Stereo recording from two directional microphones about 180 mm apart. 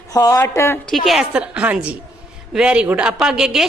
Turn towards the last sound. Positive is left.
turn(degrees=-5)  # may be behind; listen again after turning